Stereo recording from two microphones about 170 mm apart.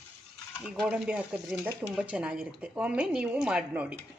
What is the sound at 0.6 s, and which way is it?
Speech, 5° right (ahead or behind).